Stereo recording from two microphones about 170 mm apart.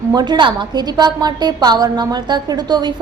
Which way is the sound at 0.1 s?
25° right (ahead or behind).